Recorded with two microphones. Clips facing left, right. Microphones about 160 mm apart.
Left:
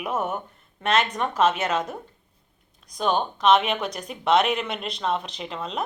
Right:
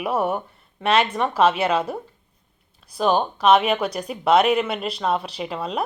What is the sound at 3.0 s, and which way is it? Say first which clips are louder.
A woman's voice: right 4 dB; 5° right (ahead or behind).